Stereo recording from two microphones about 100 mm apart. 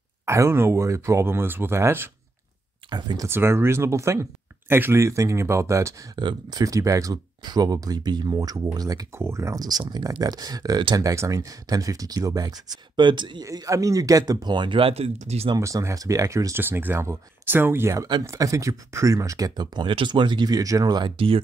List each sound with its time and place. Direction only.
0.2 s speech: 30° right (ahead or behind)
2.9 s speech: 45° right (ahead or behind)
3.3 s speech: 25° right (ahead or behind)
6.1 s speech: 45° right (ahead or behind)
13.4 s speech: 35° right (ahead or behind); by 15.5 s 90° right
15.5 s speech: 35° right (ahead or behind)
16.5 s speech: 20° right (ahead or behind); by 21.1 s 45° right (ahead or behind)